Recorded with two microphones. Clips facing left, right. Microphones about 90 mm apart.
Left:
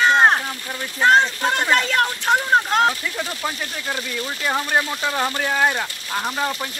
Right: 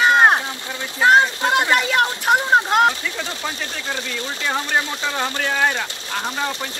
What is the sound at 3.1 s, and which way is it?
Speech, 10° left (ahead or behind).